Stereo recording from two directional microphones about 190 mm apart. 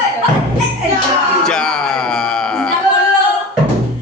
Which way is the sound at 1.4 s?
5° left (ahead or behind).